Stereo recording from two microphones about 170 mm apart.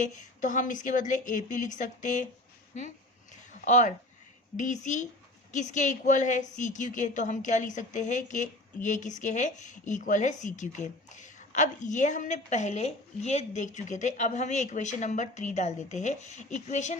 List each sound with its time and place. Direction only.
0.0 s a woman's voice: 50° left (ahead or behind)
3.6 s a woman's voice: 50° left (ahead or behind)